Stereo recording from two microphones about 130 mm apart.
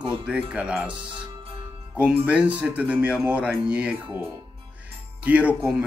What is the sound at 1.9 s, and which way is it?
Speech, 10° right (ahead or behind).